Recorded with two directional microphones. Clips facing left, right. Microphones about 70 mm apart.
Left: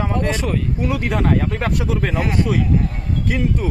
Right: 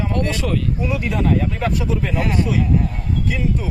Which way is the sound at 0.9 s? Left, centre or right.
Left.